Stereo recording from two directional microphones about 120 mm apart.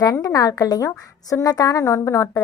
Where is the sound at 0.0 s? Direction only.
30° left (ahead or behind).